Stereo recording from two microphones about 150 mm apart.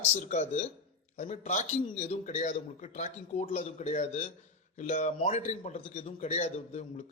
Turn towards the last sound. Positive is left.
turn(degrees=45)  # may be behind; listen again after turning